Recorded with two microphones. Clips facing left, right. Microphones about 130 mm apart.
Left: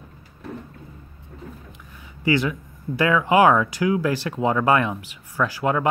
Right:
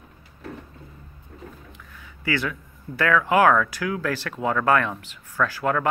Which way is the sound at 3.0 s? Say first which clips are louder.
Left 2 dB; 20° left (ahead or behind).